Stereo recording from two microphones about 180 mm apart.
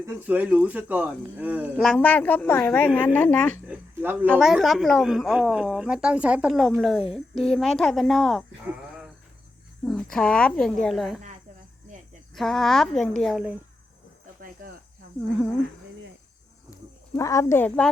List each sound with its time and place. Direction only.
0.0 s speech: 10° right (ahead or behind)
1.7 s a woman's voice: 5° left (ahead or behind)
3.7 s speech: 10° right (ahead or behind)
4.3 s speech: centre (ahead or behind)
9.8 s speech: 5° left (ahead or behind)
12.3 s speech: centre (ahead or behind)
17.2 s a woman's voice: 15° left (ahead or behind)